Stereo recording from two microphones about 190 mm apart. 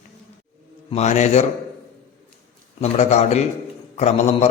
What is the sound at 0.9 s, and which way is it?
Speech, 35° left (ahead or behind).